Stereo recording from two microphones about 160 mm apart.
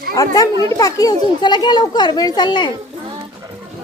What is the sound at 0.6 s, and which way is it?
A woman's voice, 20° left (ahead or behind).